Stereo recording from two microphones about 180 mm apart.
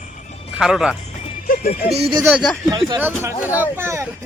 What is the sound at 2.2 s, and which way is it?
Speech, 5° right (ahead or behind).